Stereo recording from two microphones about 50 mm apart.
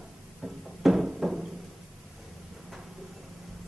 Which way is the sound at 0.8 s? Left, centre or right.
Centre.